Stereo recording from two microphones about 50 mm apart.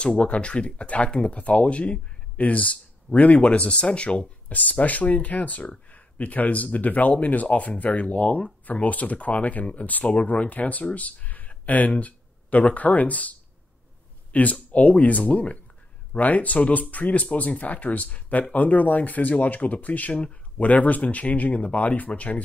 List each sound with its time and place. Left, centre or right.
0.0 s speech: left